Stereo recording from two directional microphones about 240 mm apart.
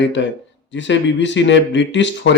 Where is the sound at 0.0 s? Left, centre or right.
Left.